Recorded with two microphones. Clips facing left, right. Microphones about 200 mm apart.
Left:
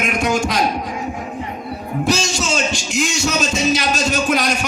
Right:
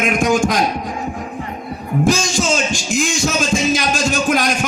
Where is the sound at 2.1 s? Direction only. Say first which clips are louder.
Right 2 dB; 45° right (ahead or behind).